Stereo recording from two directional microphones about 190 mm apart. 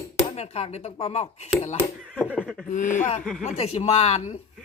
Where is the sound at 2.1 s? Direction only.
10° left (ahead or behind).